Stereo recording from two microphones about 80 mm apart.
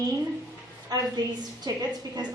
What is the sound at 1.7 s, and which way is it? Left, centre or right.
Speech, right.